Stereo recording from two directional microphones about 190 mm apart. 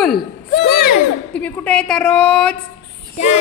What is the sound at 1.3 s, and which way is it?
A woman's voice, 5° left (ahead or behind).